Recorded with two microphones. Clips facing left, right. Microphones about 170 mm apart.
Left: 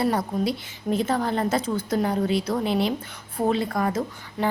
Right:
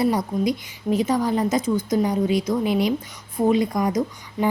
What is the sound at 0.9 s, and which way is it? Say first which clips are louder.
A woman's voice: right 3 dB; 10° right (ahead or behind).